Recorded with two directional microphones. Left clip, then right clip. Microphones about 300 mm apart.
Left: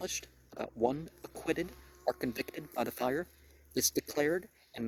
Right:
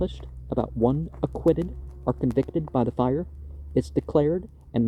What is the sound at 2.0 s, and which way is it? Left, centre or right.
Speech, centre.